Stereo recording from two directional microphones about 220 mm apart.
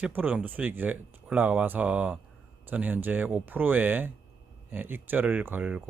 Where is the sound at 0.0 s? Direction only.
10° right (ahead or behind).